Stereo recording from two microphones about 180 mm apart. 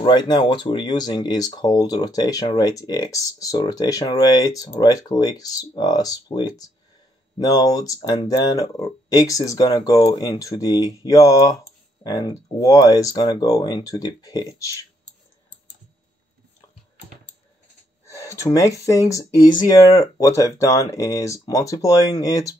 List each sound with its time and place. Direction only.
0.0 s speech: 25° left (ahead or behind)
18.0 s speech: 15° left (ahead or behind)